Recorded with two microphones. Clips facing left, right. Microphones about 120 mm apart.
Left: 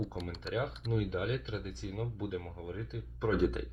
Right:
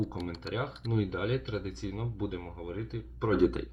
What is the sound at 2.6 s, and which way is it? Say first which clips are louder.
Speech: right 4 dB; 65° right (ahead or behind).